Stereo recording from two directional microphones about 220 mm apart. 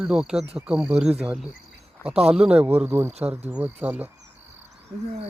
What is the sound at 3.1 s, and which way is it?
Speech, 30° right (ahead or behind).